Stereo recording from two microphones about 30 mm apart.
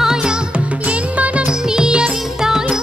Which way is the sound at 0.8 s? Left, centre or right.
Right.